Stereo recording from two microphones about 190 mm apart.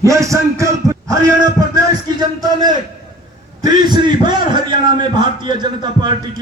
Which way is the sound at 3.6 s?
20° right (ahead or behind).